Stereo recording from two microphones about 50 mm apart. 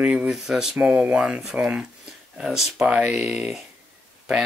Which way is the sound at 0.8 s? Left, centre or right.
Right.